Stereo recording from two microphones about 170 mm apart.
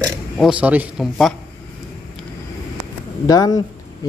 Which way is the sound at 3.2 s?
20° left (ahead or behind).